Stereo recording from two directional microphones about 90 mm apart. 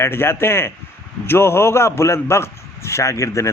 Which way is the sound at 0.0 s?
25° left (ahead or behind).